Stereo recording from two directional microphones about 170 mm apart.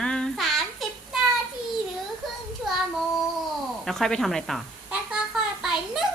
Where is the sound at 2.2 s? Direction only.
Centre (ahead or behind).